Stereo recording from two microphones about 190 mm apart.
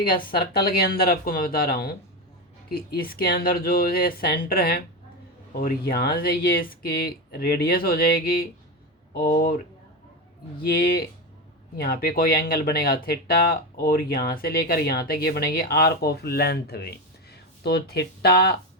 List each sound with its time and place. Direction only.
0.1 s speech: 50° left (ahead or behind)
10.6 s speech: 55° left (ahead or behind)